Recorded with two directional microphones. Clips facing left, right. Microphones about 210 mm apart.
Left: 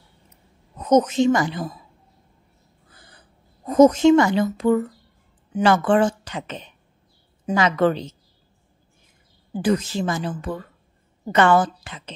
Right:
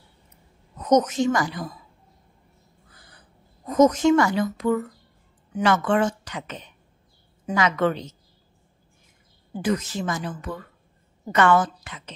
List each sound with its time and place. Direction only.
0.9 s speech: 25° left (ahead or behind)
3.6 s speech: 30° left (ahead or behind)
9.6 s a woman's voice: 30° left (ahead or behind)